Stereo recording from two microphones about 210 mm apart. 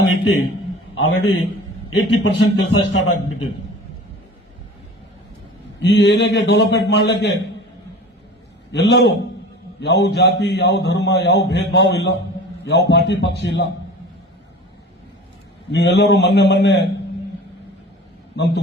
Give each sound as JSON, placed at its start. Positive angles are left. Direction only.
{"t": 0.0, "sound": "a sound", "side_deg": 60}
{"t": 1.1, "sound": "a man's voice", "side_deg": 55}
{"t": 5.8, "sound": "a man's voice", "side_deg": 55}
{"t": 8.7, "sound": "a man's voice", "side_deg": 55}
{"t": 15.7, "sound": "a man's voice", "side_deg": 55}
{"t": 18.3, "sound": "a man's voice", "side_deg": 55}